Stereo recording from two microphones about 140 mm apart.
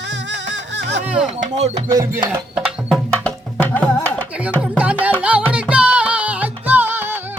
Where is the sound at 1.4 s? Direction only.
50° right (ahead or behind).